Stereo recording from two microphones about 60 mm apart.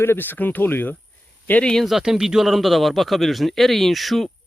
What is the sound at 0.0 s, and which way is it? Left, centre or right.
Speech, left.